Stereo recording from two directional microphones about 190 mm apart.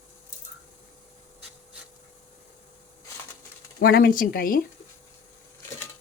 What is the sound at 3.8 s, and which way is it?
Speech, 55° left (ahead or behind).